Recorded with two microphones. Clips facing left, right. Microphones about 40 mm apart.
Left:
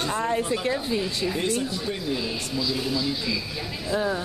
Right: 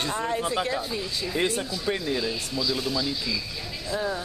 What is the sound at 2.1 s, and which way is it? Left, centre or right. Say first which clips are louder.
A woman's voice: even; centre.